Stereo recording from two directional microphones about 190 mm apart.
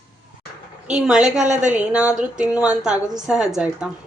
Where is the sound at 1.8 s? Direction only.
5° right (ahead or behind).